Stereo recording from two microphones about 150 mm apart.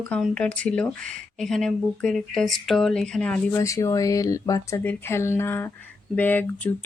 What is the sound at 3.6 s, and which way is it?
Speech, 20° left (ahead or behind).